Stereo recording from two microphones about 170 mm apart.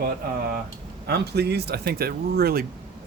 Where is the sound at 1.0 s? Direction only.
75° right (ahead or behind).